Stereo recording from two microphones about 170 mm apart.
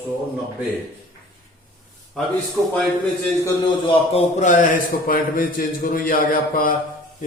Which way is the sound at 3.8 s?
40° left (ahead or behind).